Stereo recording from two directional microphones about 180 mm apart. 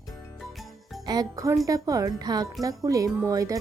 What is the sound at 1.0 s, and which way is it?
Speech, 20° right (ahead or behind).